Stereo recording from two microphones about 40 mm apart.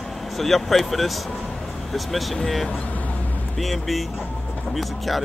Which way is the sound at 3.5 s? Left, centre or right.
Centre.